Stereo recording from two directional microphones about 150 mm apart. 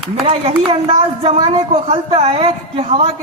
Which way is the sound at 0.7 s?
40° right (ahead or behind).